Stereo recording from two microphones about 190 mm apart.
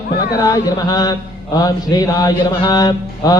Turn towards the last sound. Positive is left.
turn(degrees=20)  # may be behind; listen again after turning